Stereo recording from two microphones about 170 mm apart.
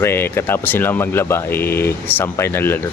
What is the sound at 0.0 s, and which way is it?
Speech, 15° left (ahead or behind).